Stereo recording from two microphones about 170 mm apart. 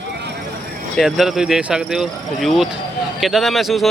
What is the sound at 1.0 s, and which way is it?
A man's voice, centre (ahead or behind).